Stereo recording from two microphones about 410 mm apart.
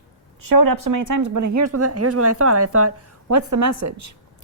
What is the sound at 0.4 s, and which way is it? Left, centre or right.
Speech, right.